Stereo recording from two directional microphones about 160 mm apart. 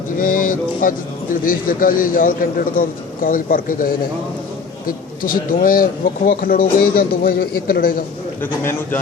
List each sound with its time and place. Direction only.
0.2 s speech: 60° left (ahead or behind)
8.4 s a man's voice: 15° left (ahead or behind)